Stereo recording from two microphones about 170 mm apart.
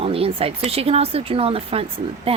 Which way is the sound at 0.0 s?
35° right (ahead or behind).